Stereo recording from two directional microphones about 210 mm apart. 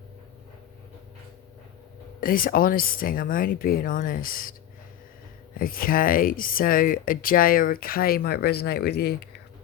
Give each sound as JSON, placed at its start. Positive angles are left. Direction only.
{"t": 2.2, "sound": "speech", "side_deg": 40}
{"t": 5.5, "sound": "speech", "side_deg": 45}